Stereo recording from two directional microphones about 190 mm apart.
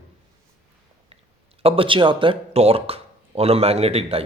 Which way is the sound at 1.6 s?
30° right (ahead or behind).